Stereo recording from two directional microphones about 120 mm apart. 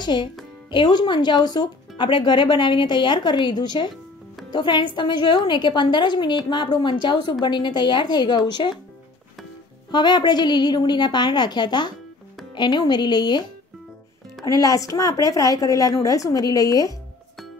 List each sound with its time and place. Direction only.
0.0 s a child's voice: 40° left (ahead or behind)
9.8 s a woman's voice: 35° left (ahead or behind)